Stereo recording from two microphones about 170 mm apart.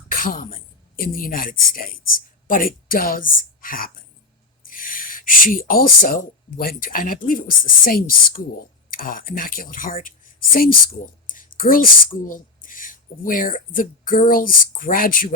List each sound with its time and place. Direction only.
0.1 s a woman's voice: 55° left (ahead or behind)